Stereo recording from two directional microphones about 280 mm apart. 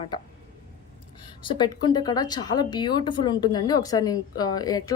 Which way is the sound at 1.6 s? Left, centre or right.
Centre.